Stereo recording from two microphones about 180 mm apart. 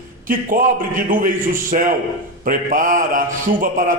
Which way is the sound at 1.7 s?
45° right (ahead or behind).